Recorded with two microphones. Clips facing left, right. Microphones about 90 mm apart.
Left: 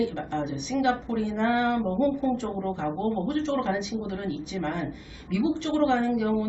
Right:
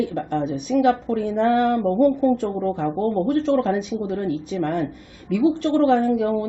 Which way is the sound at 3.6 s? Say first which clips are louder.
Right 6 dB; 50° right (ahead or behind).